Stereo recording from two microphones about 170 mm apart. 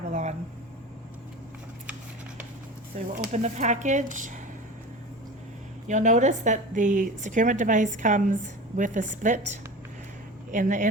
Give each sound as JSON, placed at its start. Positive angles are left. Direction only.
{"t": 0.1, "sound": "a sound", "side_deg": -45}
{"t": 2.9, "sound": "a woman's voice", "side_deg": -50}
{"t": 5.9, "sound": "a woman's voice", "side_deg": -45}
{"t": 10.5, "sound": "a woman's voice", "side_deg": -45}